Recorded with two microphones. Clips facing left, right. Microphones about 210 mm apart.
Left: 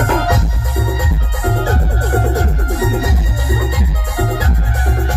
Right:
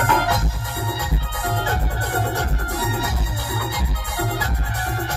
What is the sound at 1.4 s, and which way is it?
Music, 40° left (ahead or behind).